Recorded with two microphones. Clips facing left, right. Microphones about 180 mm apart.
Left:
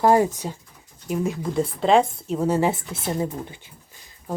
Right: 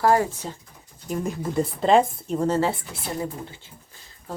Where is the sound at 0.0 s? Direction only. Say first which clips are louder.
Left 3 dB; 20° left (ahead or behind).